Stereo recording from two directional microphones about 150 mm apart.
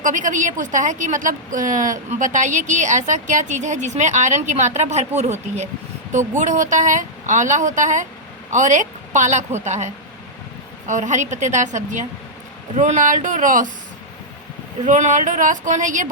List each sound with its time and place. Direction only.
0.0 s a woman's voice: 60° right (ahead or behind)
14.8 s a woman's voice: 55° right (ahead or behind)